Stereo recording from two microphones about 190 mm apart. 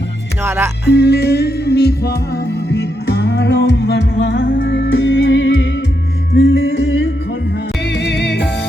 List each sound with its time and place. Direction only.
0.4 s speech: 15° right (ahead or behind)
0.9 s music: 60° left (ahead or behind); by 7.1 s 75° left (ahead or behind)
7.9 s music: 65° left (ahead or behind)